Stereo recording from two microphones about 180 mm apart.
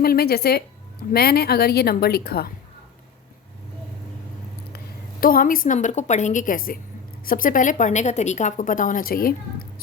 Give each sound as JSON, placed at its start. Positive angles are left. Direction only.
{"t": 0.0, "sound": "a woman's voice", "side_deg": 60}
{"t": 5.2, "sound": "a woman's voice", "side_deg": 50}